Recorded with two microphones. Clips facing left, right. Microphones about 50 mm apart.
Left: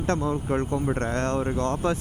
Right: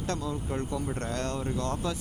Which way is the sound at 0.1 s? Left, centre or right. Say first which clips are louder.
Left 8 dB; left.